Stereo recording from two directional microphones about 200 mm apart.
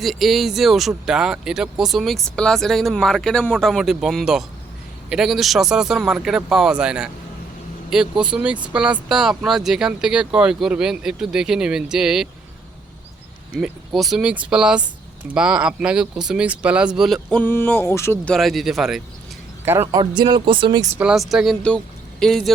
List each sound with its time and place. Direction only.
0.0 s speech: centre (ahead or behind)
8.2 s speech: 5° right (ahead or behind)
13.6 s speech: centre (ahead or behind)
18.3 s speech: centre (ahead or behind); by 20.8 s 25° right (ahead or behind)
20.9 s speech: 5° right (ahead or behind)